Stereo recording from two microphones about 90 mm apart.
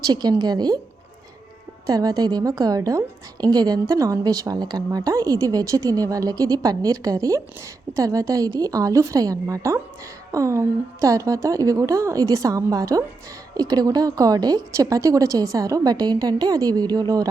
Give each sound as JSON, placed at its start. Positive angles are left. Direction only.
{"t": 0.1, "sound": "a woman's voice", "side_deg": -50}
{"t": 1.9, "sound": "a woman's voice", "side_deg": -45}